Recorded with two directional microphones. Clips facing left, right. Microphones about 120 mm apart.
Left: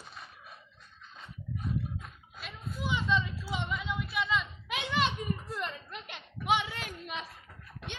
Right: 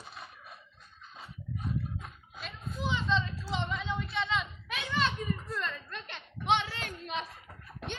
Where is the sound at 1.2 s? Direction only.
Centre (ahead or behind).